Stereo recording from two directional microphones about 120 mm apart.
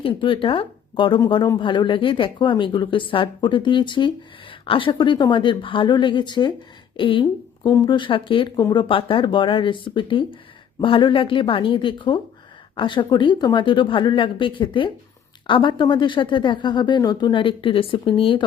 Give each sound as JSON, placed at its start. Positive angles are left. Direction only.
{"t": 0.0, "sound": "a woman's voice", "side_deg": 45}